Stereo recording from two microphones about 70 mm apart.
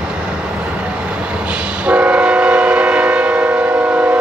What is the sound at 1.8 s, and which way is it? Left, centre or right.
Train, centre.